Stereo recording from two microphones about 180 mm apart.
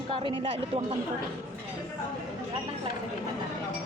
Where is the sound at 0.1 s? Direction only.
30° right (ahead or behind).